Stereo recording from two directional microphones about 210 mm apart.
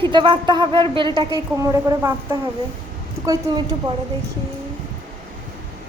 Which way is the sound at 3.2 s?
15° right (ahead or behind).